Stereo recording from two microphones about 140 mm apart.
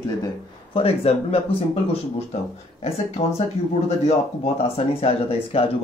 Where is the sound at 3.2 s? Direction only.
55° left (ahead or behind).